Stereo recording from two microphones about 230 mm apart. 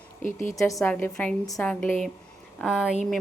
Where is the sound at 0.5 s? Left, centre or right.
Centre.